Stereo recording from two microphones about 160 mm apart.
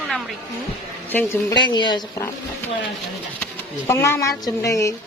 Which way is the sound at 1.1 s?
15° left (ahead or behind).